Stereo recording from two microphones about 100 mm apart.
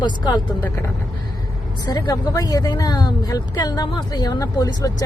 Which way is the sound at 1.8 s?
45° left (ahead or behind).